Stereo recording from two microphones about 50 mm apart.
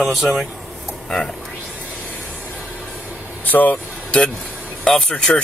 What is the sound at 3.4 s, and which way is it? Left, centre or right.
Vehicle, left.